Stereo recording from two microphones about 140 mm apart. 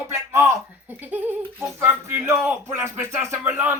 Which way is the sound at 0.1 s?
20° right (ahead or behind).